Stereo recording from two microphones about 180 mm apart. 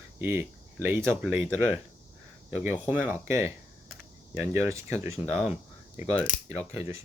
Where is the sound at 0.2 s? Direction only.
15° right (ahead or behind).